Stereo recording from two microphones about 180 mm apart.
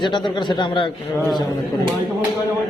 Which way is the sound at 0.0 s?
25° left (ahead or behind).